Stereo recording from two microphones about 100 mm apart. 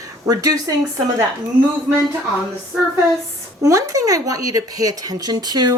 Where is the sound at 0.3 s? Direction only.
35° right (ahead or behind).